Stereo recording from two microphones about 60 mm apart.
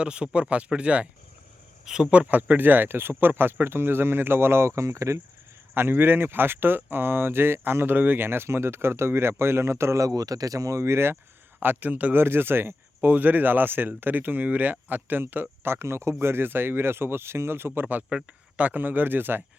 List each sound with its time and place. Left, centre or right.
0.0 s speech: centre
1.8 s speech: centre
2.0 s speech: right
5.7 s speech: right
11.6 s speech: right
12.2 s speech: right